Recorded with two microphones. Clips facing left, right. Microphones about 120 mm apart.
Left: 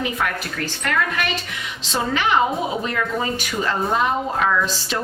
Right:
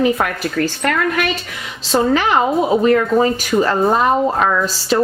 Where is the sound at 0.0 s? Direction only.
40° right (ahead or behind).